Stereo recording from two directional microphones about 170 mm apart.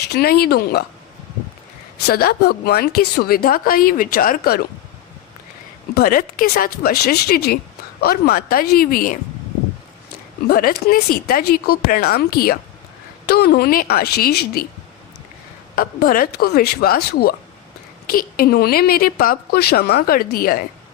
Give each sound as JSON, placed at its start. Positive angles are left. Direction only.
{"t": 0.1, "sound": "a woman's voice", "side_deg": 65}
{"t": 2.0, "sound": "a woman's voice", "side_deg": 70}
{"t": 5.9, "sound": "a woman's voice", "side_deg": 60}
{"t": 10.5, "sound": "a woman's voice", "side_deg": 60}
{"t": 15.7, "sound": "a woman's voice", "side_deg": 60}